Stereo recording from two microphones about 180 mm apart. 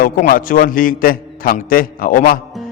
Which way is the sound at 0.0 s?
50° left (ahead or behind).